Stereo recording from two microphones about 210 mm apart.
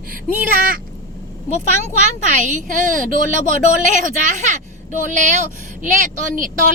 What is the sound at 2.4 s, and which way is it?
Speech, 35° right (ahead or behind).